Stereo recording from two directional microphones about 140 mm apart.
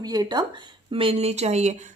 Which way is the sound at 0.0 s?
30° right (ahead or behind).